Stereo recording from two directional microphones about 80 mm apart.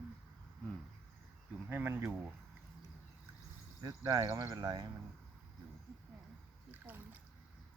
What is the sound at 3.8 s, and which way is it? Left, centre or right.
Speech, right.